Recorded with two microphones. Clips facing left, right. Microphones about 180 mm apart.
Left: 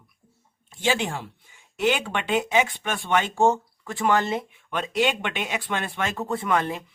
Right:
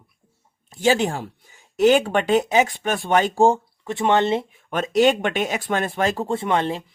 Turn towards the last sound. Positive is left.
turn(degrees=-30)  # may be behind; listen again after turning